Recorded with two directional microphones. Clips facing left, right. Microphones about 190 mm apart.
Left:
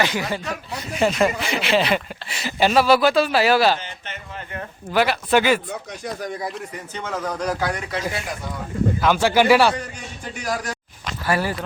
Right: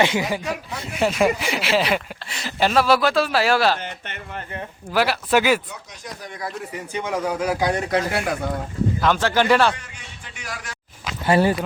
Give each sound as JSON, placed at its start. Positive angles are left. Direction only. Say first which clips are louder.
{"t": 0.0, "sound": "speech", "louder": "right 3 dB", "side_deg": -20}
{"t": 3.8, "sound": "speech", "louder": "right 2 dB", "side_deg": -55}
{"t": 4.9, "sound": "speech", "louder": "left 1 dB", "side_deg": -5}
{"t": 6.7, "sound": "speech", "louder": "right 3 dB", "side_deg": -10}
{"t": 7.9, "sound": "speech", "louder": "right 5 dB", "side_deg": -60}
{"t": 9.0, "sound": "speech", "louder": "left 2 dB", "side_deg": 5}
{"t": 10.3, "sound": "speech", "louder": "left 9 dB", "side_deg": 40}
{"t": 11.3, "sound": "speech", "louder": "right 5 dB", "side_deg": -25}